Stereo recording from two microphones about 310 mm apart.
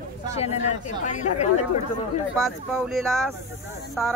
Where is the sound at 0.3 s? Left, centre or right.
Left.